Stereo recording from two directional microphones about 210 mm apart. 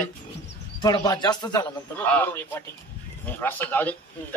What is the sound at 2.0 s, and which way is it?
A man's voice, 10° left (ahead or behind).